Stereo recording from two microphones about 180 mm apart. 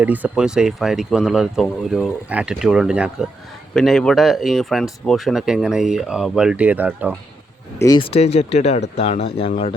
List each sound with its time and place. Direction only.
0.0 s speech: 10° right (ahead or behind)
7.8 s speech: 25° left (ahead or behind)